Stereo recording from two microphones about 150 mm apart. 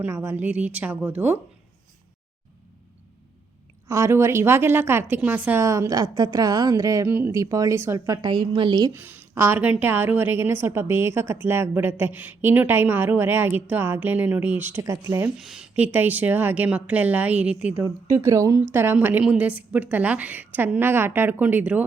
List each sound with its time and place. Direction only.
0.0 s a woman's voice: 15° right (ahead or behind)
3.8 s a woman's voice: 20° right (ahead or behind)
8.9 s a woman's voice: 15° right (ahead or behind)
15.4 s a woman's voice: 5° right (ahead or behind)
17.8 s a woman's voice: 20° right (ahead or behind)